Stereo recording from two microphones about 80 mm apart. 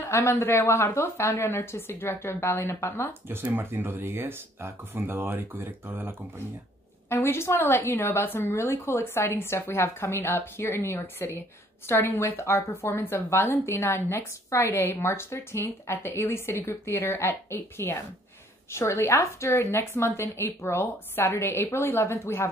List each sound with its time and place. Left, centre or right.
0.0 s a woman's voice: left
3.1 s speech: right
7.1 s a woman's voice: left